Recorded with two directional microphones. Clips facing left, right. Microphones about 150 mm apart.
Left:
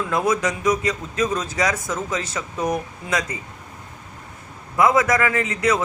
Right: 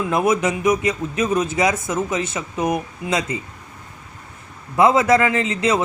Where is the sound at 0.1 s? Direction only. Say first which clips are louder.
Right 3 dB; 20° right (ahead or behind).